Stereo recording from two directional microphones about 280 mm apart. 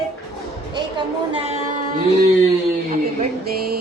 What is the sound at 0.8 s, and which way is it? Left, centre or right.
Speech, centre.